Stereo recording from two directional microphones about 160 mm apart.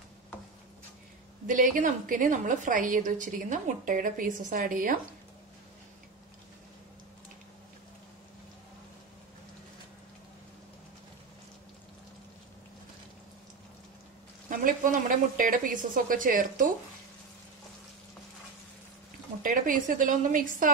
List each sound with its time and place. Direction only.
1.5 s a woman's voice: 55° right (ahead or behind)
14.5 s a woman's voice: 60° right (ahead or behind)
19.4 s a woman's voice: 60° right (ahead or behind)